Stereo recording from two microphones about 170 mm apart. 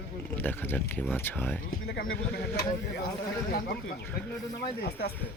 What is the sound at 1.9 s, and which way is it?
Speech, 60° left (ahead or behind).